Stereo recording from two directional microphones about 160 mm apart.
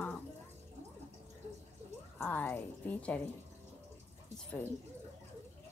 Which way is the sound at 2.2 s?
10° left (ahead or behind).